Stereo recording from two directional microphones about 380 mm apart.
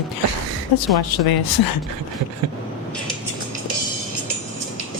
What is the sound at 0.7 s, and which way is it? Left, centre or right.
Speech, left.